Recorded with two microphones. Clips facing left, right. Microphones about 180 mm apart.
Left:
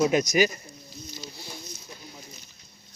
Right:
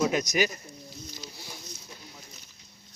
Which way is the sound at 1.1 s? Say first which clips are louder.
Left 3 dB; 10° right (ahead or behind).